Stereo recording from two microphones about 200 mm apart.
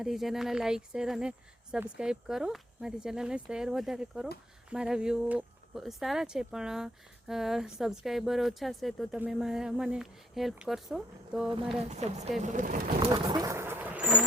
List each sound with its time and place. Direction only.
0.0 s speech: centre (ahead or behind)
11.8 s speech: 35° right (ahead or behind)
13.0 s bird: 20° right (ahead or behind)